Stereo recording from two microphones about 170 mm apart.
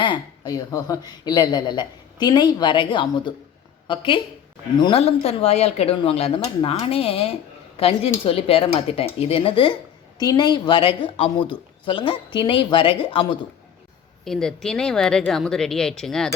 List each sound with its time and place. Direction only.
0.0 s speech: 25° left (ahead or behind)
14.3 s speech: 5° left (ahead or behind)